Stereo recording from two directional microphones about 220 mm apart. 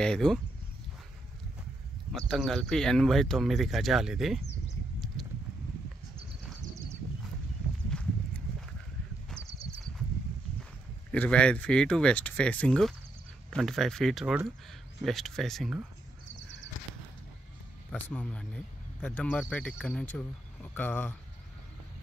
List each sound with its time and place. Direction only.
0.0 s speech: 5° left (ahead or behind)
2.1 s speech: centre (ahead or behind)
5.2 s a sound: centre (ahead or behind)
7.9 s horse: 5° left (ahead or behind)
9.5 s horse: 25° right (ahead or behind)
11.1 s speech: 5° left (ahead or behind)
17.9 s speech: 5° left (ahead or behind)